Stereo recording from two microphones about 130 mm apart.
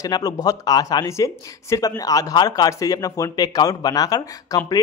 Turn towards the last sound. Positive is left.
turn(degrees=30)  # may be behind; listen again after turning